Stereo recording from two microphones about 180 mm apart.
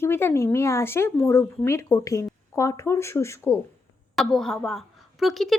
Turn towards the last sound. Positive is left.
turn(degrees=0)  # may be behind; listen again after turning